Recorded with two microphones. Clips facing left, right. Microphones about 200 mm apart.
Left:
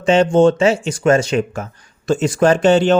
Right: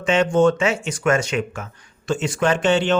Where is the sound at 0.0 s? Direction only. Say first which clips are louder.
Left 5 dB; 30° left (ahead or behind).